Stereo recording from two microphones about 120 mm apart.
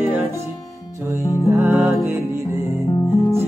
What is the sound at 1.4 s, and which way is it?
Music, 15° right (ahead or behind).